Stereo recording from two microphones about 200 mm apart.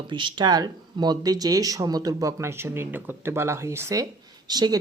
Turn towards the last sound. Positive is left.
turn(degrees=-20)  # may be behind; listen again after turning